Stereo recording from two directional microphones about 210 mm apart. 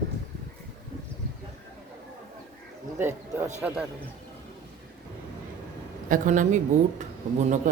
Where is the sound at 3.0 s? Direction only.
10° right (ahead or behind).